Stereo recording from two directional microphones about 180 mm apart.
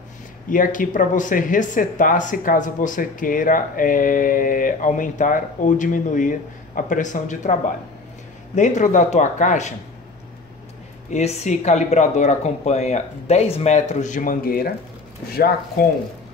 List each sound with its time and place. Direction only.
0.5 s speech: 50° left (ahead or behind)
8.5 s speech: 45° left (ahead or behind)
11.1 s speech: 40° left (ahead or behind); by 14.7 s 55° left (ahead or behind)